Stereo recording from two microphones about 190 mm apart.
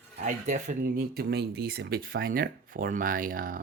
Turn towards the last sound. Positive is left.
turn(degrees=-45)  # may be behind; listen again after turning